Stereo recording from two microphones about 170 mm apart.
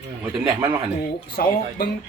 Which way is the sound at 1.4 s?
60° left (ahead or behind).